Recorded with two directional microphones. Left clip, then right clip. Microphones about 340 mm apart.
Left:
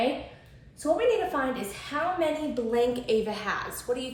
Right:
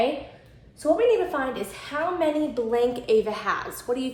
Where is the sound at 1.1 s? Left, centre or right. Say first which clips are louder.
Right 3 dB; centre.